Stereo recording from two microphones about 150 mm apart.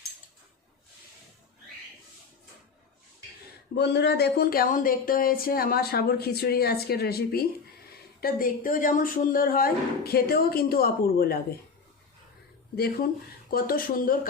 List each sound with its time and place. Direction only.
3.8 s speech: 90° left
8.2 s speech: 70° left (ahead or behind); by 11.3 s 90° left
12.7 s speech: 90° left
13.5 s speech: 80° left